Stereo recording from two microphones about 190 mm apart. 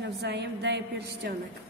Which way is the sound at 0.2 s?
60° right (ahead or behind).